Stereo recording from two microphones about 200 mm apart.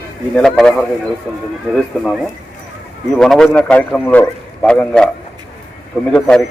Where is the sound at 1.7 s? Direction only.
Centre (ahead or behind).